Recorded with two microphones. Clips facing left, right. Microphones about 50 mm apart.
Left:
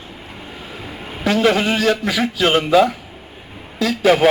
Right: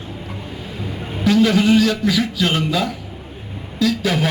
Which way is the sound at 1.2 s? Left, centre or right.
Left.